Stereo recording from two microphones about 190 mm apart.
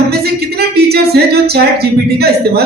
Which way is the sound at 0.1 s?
55° right (ahead or behind).